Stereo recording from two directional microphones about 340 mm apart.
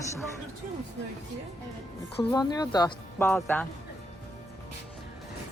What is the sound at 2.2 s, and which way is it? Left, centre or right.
Speech, centre.